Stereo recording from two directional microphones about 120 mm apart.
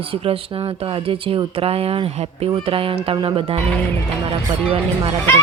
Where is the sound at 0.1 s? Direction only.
50° right (ahead or behind).